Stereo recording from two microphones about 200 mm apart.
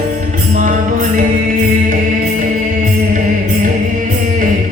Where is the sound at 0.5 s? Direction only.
40° right (ahead or behind).